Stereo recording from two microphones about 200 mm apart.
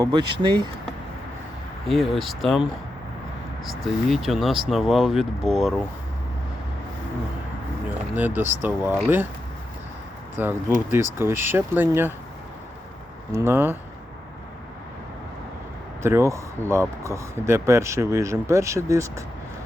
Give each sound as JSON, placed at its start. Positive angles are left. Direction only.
{"t": 0.0, "sound": "speech", "side_deg": -20}
{"t": 1.9, "sound": "speech", "side_deg": 0}
{"t": 3.7, "sound": "speech", "side_deg": 0}
{"t": 8.1, "sound": "speech", "side_deg": -10}
{"t": 10.3, "sound": "speech", "side_deg": -10}
{"t": 13.3, "sound": "speech", "side_deg": -10}
{"t": 16.0, "sound": "speech", "side_deg": -15}